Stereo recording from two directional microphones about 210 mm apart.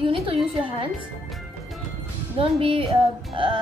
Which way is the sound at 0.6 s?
25° right (ahead or behind).